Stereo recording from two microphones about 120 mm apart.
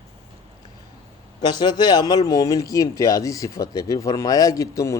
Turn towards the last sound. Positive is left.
turn(degrees=30)  # may be behind; listen again after turning